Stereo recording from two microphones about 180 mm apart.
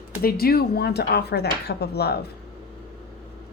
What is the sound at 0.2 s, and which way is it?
Speech, 55° left (ahead or behind).